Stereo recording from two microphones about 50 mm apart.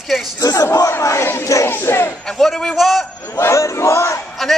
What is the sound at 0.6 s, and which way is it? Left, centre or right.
Battle cry, left.